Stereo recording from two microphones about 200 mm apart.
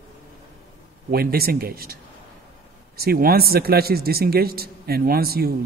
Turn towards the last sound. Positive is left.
turn(degrees=-50)  # may be behind; listen again after turning